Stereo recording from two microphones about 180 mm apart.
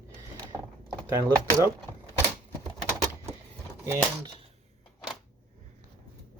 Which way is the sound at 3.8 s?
15° right (ahead or behind).